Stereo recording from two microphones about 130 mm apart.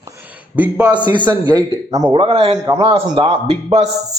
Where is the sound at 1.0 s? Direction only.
35° right (ahead or behind).